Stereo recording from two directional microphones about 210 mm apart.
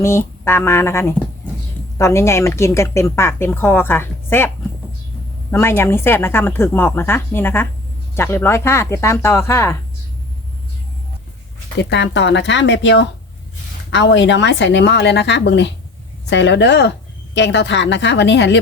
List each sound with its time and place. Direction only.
0.0 s speech: 10° left (ahead or behind)
11.8 s speech: 55° left (ahead or behind)